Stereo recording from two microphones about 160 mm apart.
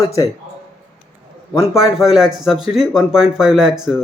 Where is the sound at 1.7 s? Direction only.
5° right (ahead or behind).